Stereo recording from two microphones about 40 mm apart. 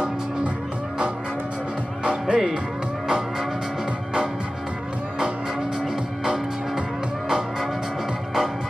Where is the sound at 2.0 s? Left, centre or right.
Right.